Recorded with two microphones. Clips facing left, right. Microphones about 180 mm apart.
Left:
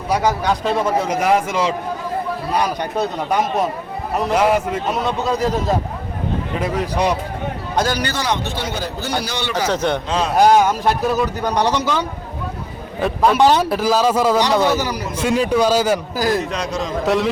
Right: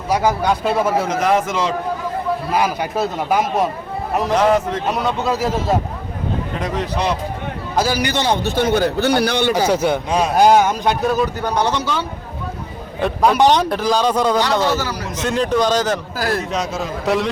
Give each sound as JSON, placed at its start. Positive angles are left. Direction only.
{"t": 0.1, "sound": "a man's voice", "side_deg": -5}
{"t": 1.0, "sound": "a man's voice", "side_deg": 10}
{"t": 2.5, "sound": "a man's voice", "side_deg": -5}
{"t": 6.6, "sound": "a man's voice", "side_deg": 10}
{"t": 7.8, "sound": "a man's voice", "side_deg": -5}
{"t": 8.1, "sound": "a man's voice", "side_deg": -25}
{"t": 8.4, "sound": "a man's voice", "side_deg": -50}
{"t": 9.6, "sound": "a man's voice", "side_deg": -10}
{"t": 13.0, "sound": "a man's voice", "side_deg": 0}
{"t": 16.5, "sound": "a man's voice", "side_deg": -5}